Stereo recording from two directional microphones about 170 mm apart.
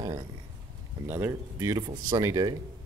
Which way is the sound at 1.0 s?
15° right (ahead or behind).